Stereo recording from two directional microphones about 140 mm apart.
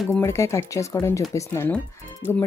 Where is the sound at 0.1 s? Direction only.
20° left (ahead or behind).